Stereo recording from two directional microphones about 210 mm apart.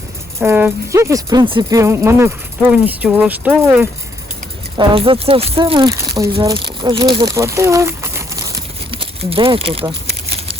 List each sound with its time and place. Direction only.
0.3 s speech: 10° right (ahead or behind)
4.8 s speech: 25° right (ahead or behind)